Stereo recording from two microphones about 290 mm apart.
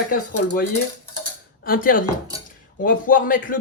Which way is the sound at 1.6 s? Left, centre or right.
Left.